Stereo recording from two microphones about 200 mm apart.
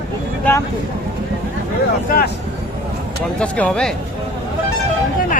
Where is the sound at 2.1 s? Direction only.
45° left (ahead or behind).